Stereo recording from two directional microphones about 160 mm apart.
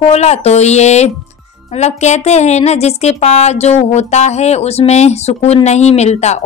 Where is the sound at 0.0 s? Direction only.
45° left (ahead or behind).